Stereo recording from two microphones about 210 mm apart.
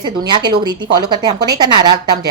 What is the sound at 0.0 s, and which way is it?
A woman's voice, 20° right (ahead or behind).